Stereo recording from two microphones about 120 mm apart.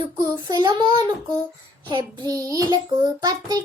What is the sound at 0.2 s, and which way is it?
Child singing, 30° right (ahead or behind).